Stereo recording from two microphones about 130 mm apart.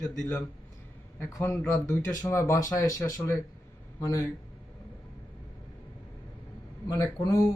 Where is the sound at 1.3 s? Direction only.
20° left (ahead or behind).